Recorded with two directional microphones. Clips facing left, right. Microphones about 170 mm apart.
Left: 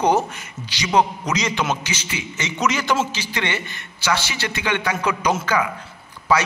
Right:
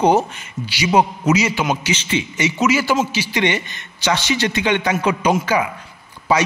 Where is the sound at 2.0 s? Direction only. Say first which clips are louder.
Right 9 dB; 30° right (ahead or behind).